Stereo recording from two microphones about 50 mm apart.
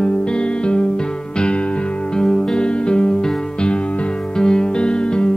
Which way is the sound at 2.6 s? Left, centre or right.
Centre.